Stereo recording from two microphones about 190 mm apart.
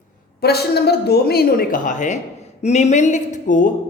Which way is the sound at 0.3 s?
60° left (ahead or behind).